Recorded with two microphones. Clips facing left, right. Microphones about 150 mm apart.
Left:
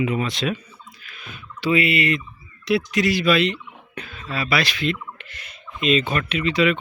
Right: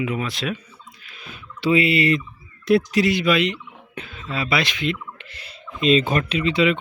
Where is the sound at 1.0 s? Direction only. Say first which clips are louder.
Even; 30° right (ahead or behind).